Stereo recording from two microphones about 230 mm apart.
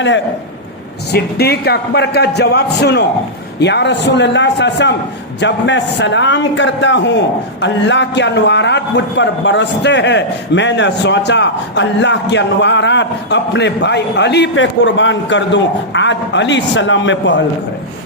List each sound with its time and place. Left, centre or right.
1.1 s a man's voice: left